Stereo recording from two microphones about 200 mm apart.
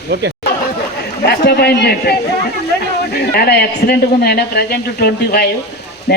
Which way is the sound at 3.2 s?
50° left (ahead or behind).